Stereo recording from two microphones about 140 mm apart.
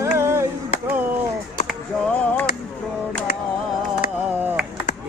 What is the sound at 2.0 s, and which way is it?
Music, 10° left (ahead or behind).